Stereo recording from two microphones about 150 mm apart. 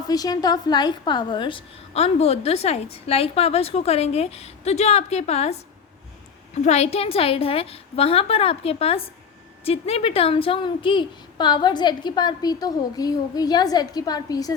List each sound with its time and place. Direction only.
0.1 s a woman's voice: 25° left (ahead or behind)